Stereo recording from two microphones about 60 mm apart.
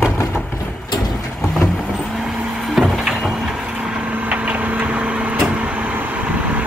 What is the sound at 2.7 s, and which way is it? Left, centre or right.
Wood, centre.